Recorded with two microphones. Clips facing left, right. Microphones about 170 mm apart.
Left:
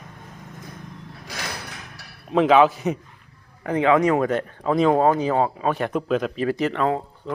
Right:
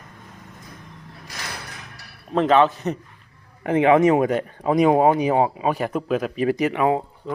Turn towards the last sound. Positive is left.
turn(degrees=-10)  # may be behind; listen again after turning